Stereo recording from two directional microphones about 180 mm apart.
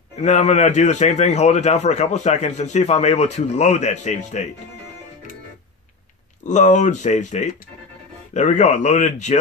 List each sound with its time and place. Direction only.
0.2 s a man's voice: 40° left (ahead or behind)
6.4 s a man's voice: 40° left (ahead or behind)